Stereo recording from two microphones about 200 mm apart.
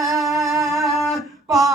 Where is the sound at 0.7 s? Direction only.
Centre (ahead or behind).